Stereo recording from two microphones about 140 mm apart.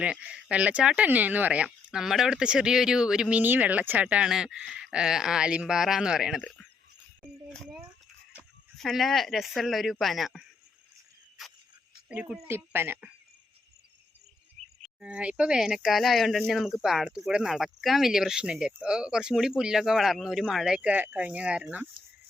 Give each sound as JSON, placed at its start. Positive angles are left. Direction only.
{"t": 0.0, "sound": "speech", "side_deg": -10}
{"t": 7.5, "sound": "speech", "side_deg": 5}
{"t": 8.8, "sound": "speech", "side_deg": 0}
{"t": 12.0, "sound": "speech", "side_deg": -5}
{"t": 14.6, "sound": "a sound", "side_deg": -55}
{"t": 15.0, "sound": "speech", "side_deg": -10}